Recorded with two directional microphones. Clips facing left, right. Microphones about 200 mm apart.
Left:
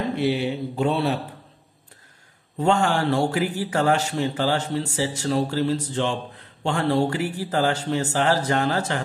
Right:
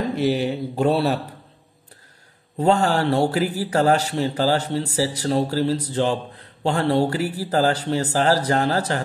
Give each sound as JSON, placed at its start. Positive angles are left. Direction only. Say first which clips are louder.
{"t": 0.1, "sound": "speech", "louder": "right 2 dB", "side_deg": -40}
{"t": 2.6, "sound": "speech", "louder": "right 2 dB", "side_deg": -35}